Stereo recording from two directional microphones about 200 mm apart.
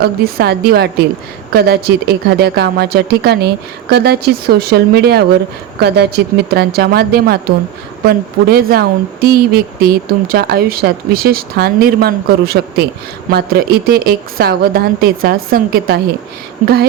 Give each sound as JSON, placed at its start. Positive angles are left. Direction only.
{"t": 0.0, "sound": "speech", "side_deg": -50}